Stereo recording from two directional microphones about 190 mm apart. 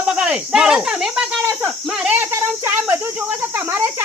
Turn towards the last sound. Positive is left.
turn(degrees=-10)  # may be behind; listen again after turning